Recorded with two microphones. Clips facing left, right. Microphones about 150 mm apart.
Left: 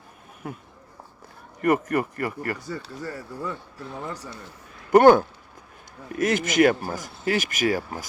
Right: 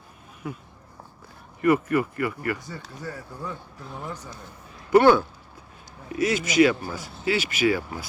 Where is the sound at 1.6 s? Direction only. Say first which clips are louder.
Right 1 dB; 45° left (ahead or behind).